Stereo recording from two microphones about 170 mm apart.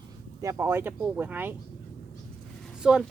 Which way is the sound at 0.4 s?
15° right (ahead or behind).